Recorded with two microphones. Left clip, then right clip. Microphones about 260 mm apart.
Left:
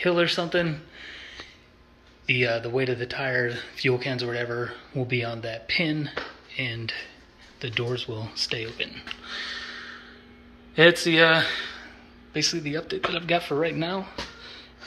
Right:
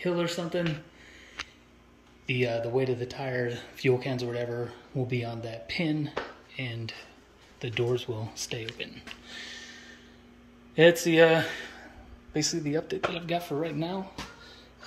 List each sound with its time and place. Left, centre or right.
0.0 s speech: centre
2.2 s speech: centre
13.1 s speech: centre